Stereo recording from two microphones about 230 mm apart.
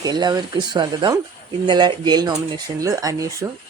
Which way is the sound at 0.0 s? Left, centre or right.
Centre.